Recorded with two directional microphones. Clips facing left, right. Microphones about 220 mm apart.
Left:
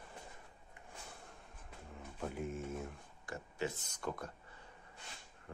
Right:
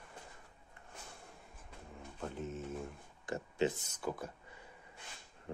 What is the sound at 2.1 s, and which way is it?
Speech, 10° left (ahead or behind).